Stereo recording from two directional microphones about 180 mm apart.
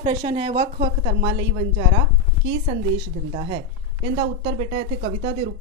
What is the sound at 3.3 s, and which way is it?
Speech, 25° right (ahead or behind).